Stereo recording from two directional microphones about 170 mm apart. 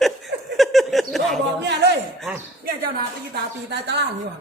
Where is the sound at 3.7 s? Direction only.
85° right.